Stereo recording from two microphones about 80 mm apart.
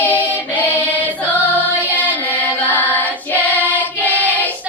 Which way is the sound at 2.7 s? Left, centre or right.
Left.